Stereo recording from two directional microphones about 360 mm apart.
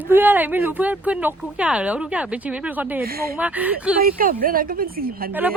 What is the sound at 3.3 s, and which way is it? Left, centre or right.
Speech, centre.